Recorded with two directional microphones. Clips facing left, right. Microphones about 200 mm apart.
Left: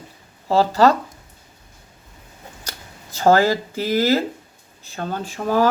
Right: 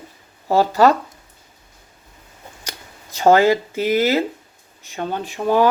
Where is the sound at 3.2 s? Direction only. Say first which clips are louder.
Right 2 dB; 15° right (ahead or behind).